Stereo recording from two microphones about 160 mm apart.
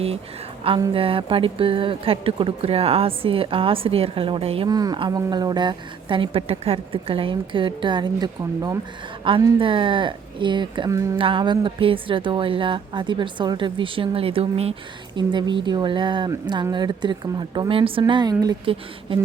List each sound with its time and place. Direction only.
0.6 s a woman's voice: 35° right (ahead or behind)
4.7 s a woman's voice: 25° right (ahead or behind)
11.2 s a woman's voice: 30° right (ahead or behind)